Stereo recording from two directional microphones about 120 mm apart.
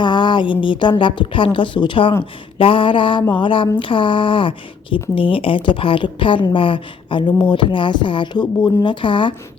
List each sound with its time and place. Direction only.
0.0 s speech: 40° left (ahead or behind)